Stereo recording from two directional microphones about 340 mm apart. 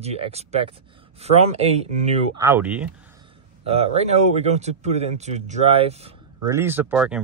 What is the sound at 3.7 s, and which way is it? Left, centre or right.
Speech, centre.